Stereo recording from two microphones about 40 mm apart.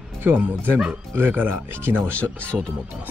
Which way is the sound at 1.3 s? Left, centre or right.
Right.